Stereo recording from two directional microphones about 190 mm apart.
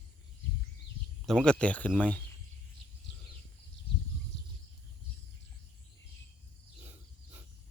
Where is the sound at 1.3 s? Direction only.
5° left (ahead or behind).